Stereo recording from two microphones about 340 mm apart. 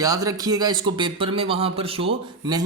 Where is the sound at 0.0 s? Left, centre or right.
Centre.